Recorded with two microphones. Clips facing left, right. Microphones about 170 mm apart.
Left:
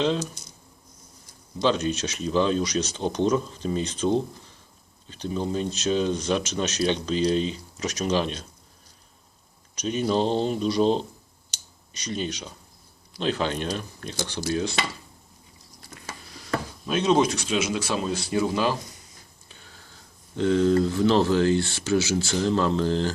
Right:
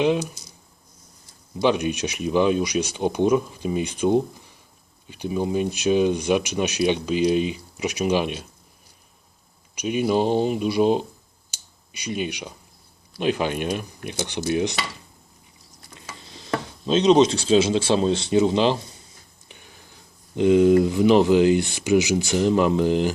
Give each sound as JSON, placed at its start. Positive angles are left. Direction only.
{"t": 0.0, "sound": "speech", "side_deg": -15}
{"t": 1.6, "sound": "speech", "side_deg": -15}
{"t": 9.7, "sound": "speech", "side_deg": -10}
{"t": 16.0, "sound": "speech", "side_deg": -25}